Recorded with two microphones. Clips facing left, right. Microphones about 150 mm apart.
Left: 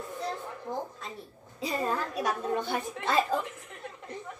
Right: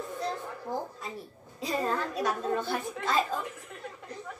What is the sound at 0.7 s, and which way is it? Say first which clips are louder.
Speech: right 1 dB; 10° right (ahead or behind).